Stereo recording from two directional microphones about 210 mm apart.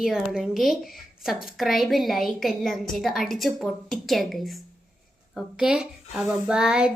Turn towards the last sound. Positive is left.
turn(degrees=-5)  # may be behind; listen again after turning